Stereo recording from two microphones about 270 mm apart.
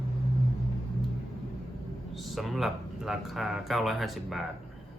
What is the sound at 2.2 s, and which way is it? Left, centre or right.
Speech, centre.